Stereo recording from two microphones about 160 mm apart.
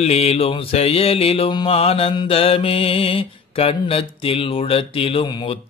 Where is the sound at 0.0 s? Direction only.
40° left (ahead or behind).